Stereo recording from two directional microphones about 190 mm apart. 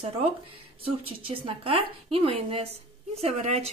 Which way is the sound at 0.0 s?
30° right (ahead or behind).